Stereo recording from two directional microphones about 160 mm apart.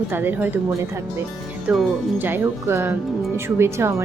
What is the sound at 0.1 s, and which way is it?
Speech, 10° right (ahead or behind).